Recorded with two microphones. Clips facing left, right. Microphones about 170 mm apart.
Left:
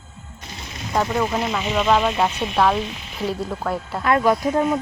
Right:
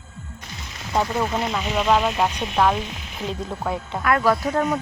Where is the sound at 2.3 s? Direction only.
5° left (ahead or behind).